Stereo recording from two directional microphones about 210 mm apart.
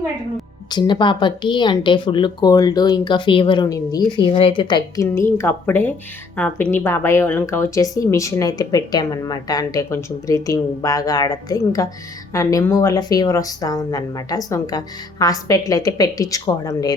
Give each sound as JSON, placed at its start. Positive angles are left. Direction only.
{"t": 0.7, "sound": "a woman's voice", "side_deg": 20}